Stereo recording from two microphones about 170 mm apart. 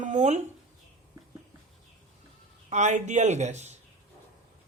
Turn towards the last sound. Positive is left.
turn(degrees=-40)  # may be behind; listen again after turning